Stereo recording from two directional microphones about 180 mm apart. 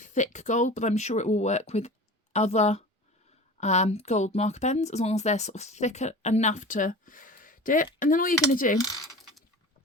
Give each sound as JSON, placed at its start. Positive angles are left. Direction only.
{"t": 0.0, "sound": "speech", "side_deg": 45}